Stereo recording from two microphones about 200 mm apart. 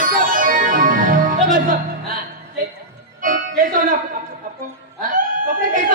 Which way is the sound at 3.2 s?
45° right (ahead or behind).